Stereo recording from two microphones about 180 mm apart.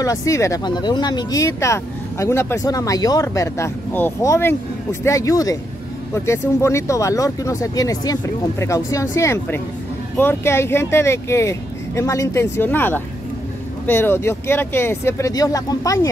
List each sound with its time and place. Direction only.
0.0 s speech: 20° left (ahead or behind)